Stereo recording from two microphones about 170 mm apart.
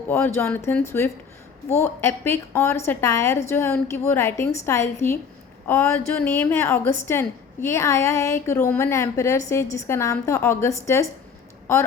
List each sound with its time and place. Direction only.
0.1 s a woman's voice: 15° left (ahead or behind)
1.8 s a woman's voice: 15° left (ahead or behind)